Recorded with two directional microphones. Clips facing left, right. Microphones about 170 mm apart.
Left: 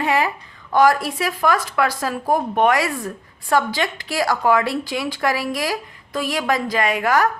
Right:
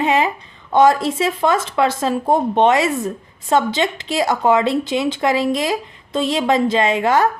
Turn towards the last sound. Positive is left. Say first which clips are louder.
# right 3 dB
turn(degrees=-25)  # may be behind; listen again after turning